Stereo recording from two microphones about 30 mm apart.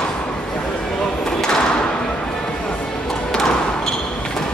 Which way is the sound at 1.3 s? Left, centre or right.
Left.